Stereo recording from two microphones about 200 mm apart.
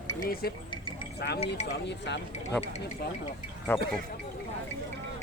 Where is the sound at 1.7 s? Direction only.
60° left (ahead or behind).